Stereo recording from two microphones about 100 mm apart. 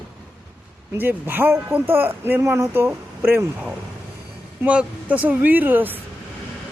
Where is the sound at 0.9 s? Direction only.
20° right (ahead or behind).